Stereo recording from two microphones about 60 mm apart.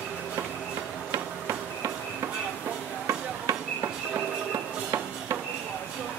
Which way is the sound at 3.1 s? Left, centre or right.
Right.